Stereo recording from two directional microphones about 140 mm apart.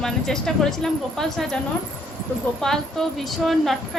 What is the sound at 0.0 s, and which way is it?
Speech, 5° left (ahead or behind).